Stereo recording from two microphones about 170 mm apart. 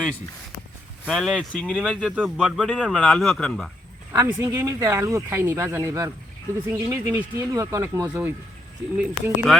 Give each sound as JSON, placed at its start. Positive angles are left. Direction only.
{"t": 1.0, "sound": "speech", "side_deg": 0}
{"t": 4.1, "sound": "speech", "side_deg": -20}